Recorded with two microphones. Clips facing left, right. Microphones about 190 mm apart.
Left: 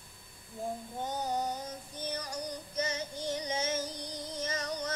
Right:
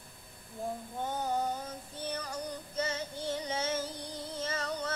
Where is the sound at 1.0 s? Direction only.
15° left (ahead or behind).